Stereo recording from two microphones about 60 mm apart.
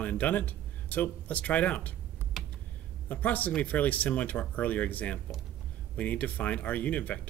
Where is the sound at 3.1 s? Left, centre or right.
Left.